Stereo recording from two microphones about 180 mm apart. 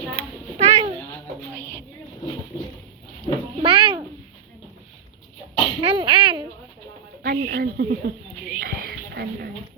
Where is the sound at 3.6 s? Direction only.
30° right (ahead or behind).